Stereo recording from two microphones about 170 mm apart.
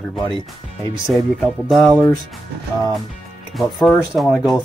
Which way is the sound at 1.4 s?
Centre (ahead or behind).